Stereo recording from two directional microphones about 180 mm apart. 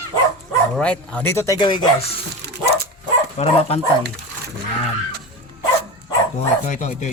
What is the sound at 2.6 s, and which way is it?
Dog, 65° right (ahead or behind).